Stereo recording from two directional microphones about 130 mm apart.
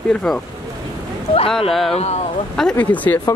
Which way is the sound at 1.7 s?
Centre (ahead or behind).